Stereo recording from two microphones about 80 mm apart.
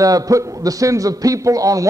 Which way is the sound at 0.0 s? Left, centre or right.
Right.